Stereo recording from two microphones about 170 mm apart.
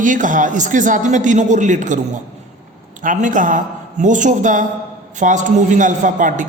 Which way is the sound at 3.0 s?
50° right (ahead or behind).